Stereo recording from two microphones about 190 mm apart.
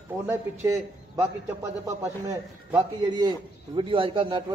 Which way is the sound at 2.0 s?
15° right (ahead or behind).